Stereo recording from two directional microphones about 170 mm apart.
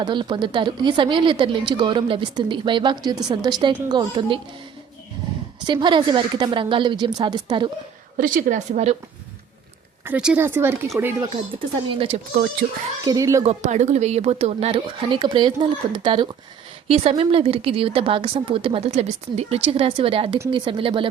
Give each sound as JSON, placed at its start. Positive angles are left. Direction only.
{"t": 0.0, "sound": "a woman's voice", "side_deg": -25}
{"t": 5.6, "sound": "a woman's voice", "side_deg": -30}
{"t": 8.2, "sound": "a woman's voice", "side_deg": -50}
{"t": 10.1, "sound": "speech", "side_deg": -10}
{"t": 11.9, "sound": "speech", "side_deg": -30}
{"t": 13.1, "sound": "a woman's voice", "side_deg": -20}
{"t": 13.4, "sound": "speech", "side_deg": -40}